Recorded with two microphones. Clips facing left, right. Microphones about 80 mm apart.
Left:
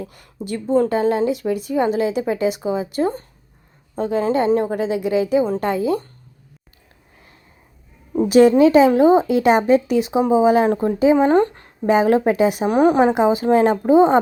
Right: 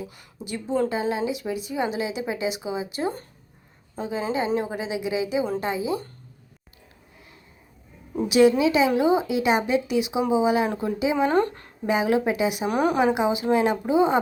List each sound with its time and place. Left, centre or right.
0.0 s speech: left
8.3 s speech: left
11.9 s speech: left